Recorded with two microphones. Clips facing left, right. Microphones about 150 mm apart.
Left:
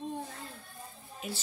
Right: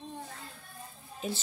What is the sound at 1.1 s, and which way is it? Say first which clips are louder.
Speech: right 4 dB; 25° right (ahead or behind).